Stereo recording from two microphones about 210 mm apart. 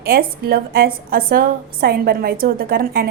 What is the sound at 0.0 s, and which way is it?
A woman's voice, 45° right (ahead or behind).